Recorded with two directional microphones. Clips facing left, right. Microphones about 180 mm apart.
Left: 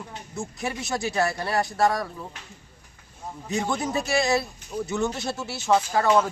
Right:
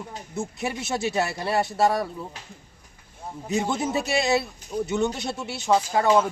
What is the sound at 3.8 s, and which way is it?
Speech, centre (ahead or behind).